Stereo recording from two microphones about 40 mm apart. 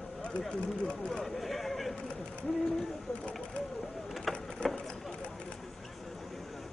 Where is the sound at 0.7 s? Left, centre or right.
Left.